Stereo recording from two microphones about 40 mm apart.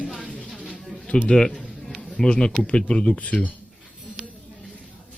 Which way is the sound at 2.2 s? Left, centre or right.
Left.